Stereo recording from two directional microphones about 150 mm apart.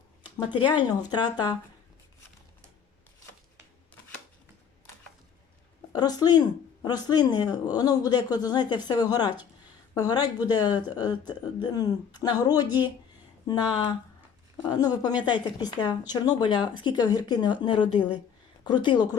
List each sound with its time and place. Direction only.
0.2 s speech: 30° left (ahead or behind)
5.9 s speech: 25° left (ahead or behind)
14.7 s speech: 25° left (ahead or behind)